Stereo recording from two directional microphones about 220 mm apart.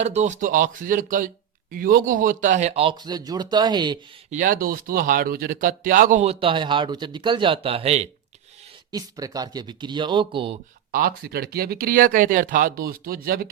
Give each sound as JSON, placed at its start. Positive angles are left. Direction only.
{"t": 0.0, "sound": "a man's voice", "side_deg": -30}
{"t": 4.3, "sound": "speech", "side_deg": -35}
{"t": 8.9, "sound": "a man's voice", "side_deg": -15}
{"t": 10.9, "sound": "speech", "side_deg": -45}